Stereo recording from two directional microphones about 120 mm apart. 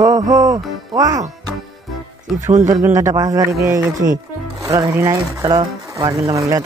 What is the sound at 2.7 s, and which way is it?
Speech, 25° right (ahead or behind).